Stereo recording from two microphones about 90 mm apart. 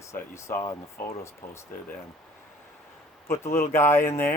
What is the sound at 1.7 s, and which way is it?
Speech, 25° left (ahead or behind).